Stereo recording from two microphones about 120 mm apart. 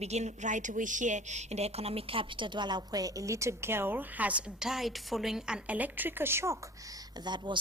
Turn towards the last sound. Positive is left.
turn(degrees=-40)  # may be behind; listen again after turning